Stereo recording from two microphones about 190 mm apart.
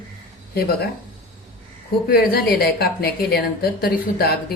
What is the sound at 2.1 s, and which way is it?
A woman's voice, 55° left (ahead or behind).